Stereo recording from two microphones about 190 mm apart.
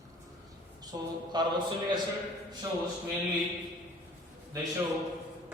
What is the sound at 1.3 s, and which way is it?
Speech, 20° right (ahead or behind).